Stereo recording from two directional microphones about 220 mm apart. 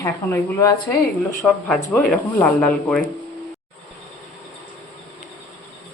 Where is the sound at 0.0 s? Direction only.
15° left (ahead or behind).